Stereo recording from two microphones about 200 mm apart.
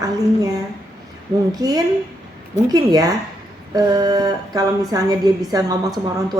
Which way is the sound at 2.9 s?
20° right (ahead or behind).